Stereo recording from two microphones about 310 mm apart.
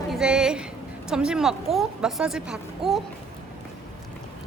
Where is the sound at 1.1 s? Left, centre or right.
Centre.